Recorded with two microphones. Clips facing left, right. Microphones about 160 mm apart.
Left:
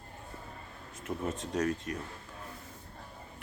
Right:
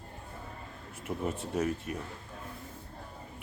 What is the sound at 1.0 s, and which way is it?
Speech, 10° right (ahead or behind).